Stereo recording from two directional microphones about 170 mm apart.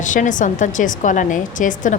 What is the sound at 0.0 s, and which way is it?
A woman's voice, 50° left (ahead or behind).